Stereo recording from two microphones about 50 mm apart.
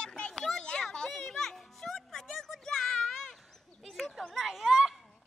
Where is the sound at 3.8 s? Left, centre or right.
Centre.